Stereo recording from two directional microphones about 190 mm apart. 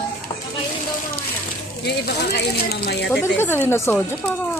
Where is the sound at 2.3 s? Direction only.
60° left (ahead or behind).